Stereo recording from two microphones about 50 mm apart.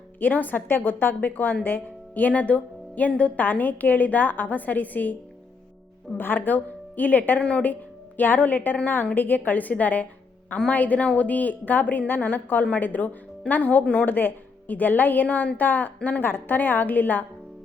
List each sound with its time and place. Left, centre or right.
0.2 s a woman's voice: left
6.1 s a woman's voice: left